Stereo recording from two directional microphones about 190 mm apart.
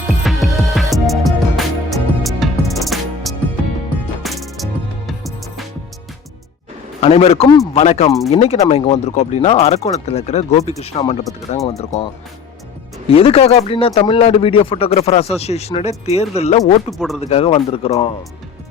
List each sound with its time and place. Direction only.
0.1 s music: centre (ahead or behind)
7.0 s speech: 30° left (ahead or behind)
13.1 s speech: 30° left (ahead or behind)